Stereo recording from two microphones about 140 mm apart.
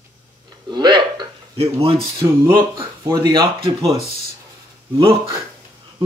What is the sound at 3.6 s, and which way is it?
Speech, 45° right (ahead or behind).